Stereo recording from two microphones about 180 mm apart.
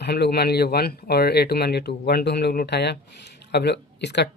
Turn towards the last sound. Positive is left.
turn(degrees=70)  # may be behind; listen again after turning